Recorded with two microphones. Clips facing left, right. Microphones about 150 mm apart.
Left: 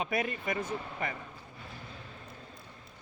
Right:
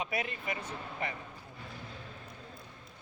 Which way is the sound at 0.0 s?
45° left (ahead or behind).